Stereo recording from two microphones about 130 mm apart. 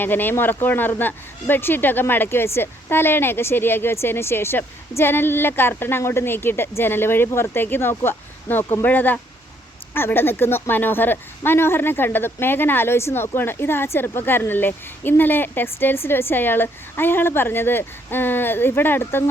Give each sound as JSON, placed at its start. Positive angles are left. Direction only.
{"t": 0.0, "sound": "speech", "side_deg": 15}